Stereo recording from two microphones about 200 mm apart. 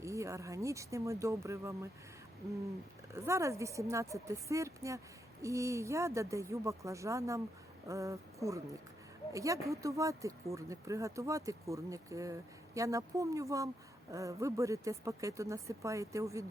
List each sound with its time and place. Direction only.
0.0 s speech: 15° right (ahead or behind)
3.1 s speech: 15° right (ahead or behind)